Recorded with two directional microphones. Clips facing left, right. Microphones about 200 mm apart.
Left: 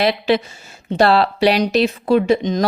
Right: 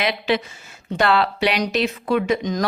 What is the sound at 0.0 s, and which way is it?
A woman's voice, 35° left (ahead or behind).